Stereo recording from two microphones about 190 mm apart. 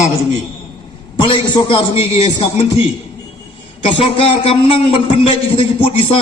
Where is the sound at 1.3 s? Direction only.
25° left (ahead or behind).